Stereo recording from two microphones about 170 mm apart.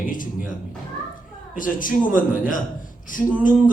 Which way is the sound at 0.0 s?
50° left (ahead or behind).